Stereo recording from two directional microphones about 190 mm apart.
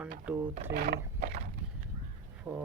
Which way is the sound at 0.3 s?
10° right (ahead or behind).